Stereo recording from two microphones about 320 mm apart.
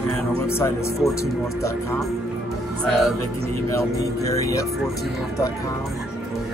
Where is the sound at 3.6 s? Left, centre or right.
Centre.